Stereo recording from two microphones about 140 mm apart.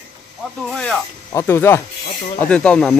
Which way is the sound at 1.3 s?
20° left (ahead or behind).